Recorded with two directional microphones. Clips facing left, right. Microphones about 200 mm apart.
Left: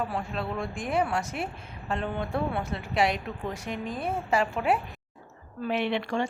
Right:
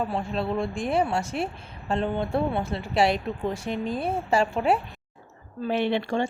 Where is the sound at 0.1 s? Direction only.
30° right (ahead or behind).